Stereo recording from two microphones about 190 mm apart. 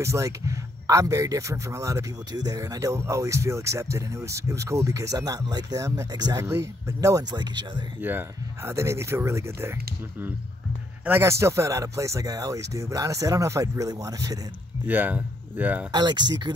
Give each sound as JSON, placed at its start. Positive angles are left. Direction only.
{"t": 0.0, "sound": "speech", "side_deg": -15}
{"t": 8.0, "sound": "speech", "side_deg": -10}
{"t": 11.1, "sound": "speech", "side_deg": -15}
{"t": 15.9, "sound": "speech", "side_deg": -20}